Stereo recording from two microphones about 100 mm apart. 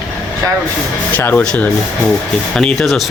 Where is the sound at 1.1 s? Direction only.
15° left (ahead or behind).